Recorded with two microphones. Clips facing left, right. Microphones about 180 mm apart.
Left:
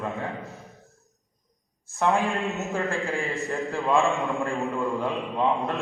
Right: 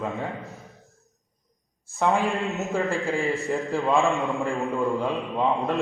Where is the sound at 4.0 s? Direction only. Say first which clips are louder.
Right 1 dB; centre (ahead or behind).